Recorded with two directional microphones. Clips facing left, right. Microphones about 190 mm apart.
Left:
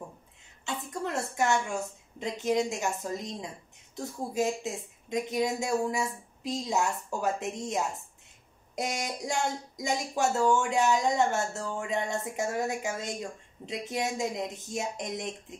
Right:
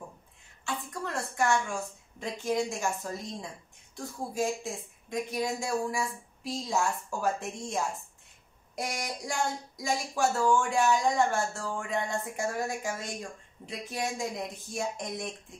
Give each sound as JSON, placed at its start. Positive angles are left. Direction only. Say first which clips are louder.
{"t": 0.7, "sound": "speech", "louder": "left 2 dB", "side_deg": 20}